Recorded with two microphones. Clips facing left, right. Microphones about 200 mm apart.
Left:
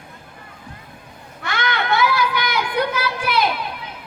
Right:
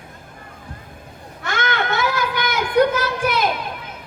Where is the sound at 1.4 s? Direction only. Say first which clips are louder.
Right 1 dB; 45° right (ahead or behind).